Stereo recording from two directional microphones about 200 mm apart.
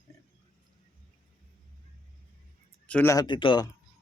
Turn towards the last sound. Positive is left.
turn(degrees=25)  # may be behind; listen again after turning